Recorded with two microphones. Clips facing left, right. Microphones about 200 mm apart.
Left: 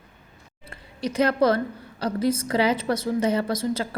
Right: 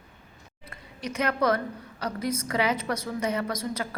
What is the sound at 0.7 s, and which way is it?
A woman's voice, 30° left (ahead or behind).